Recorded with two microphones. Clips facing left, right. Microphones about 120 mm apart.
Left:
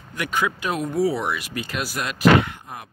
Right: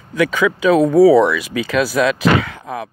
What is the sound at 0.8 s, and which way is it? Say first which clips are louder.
Speech: right 12 dB; 90° right.